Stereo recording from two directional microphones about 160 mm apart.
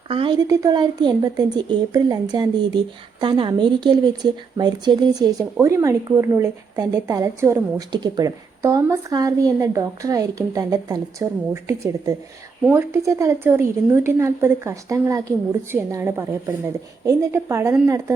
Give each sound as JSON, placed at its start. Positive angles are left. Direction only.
{"t": 0.1, "sound": "a woman's voice", "side_deg": -30}